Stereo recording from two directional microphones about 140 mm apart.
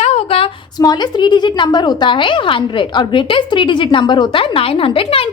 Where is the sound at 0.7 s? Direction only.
30° left (ahead or behind).